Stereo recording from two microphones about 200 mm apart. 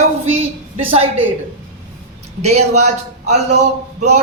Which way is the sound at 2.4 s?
35° right (ahead or behind).